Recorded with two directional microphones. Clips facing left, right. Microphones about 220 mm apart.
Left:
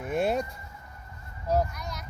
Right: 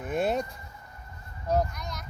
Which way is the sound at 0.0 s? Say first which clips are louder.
Left 1 dB; centre (ahead or behind).